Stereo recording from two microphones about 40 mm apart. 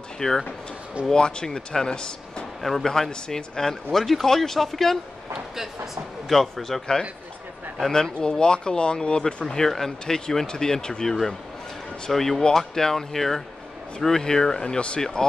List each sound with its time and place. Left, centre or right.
0.2 s speech: centre
1.1 s speech: left
2.6 s speech: centre
6.2 s speech: centre